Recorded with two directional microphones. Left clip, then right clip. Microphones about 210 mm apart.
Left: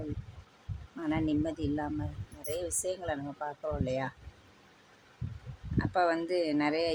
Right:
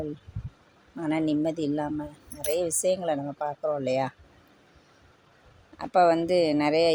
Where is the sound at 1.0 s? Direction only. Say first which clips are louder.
Right 5 dB; 20° right (ahead or behind).